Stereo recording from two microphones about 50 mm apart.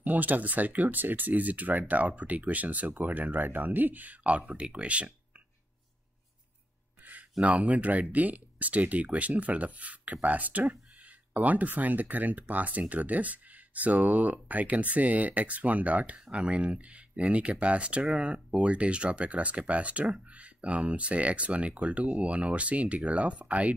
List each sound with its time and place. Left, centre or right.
0.0 s speech: right
7.0 s a sound: right
7.3 s speech: right